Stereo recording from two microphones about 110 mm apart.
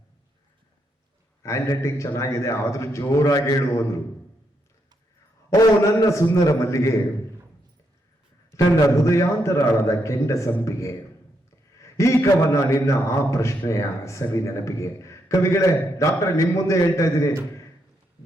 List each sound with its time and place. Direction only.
1.4 s a man's voice: 25° left (ahead or behind)
5.5 s a man's voice: 30° left (ahead or behind)
8.5 s a man's voice: 30° left (ahead or behind)